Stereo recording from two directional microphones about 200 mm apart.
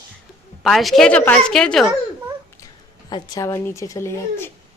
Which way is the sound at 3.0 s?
20° left (ahead or behind).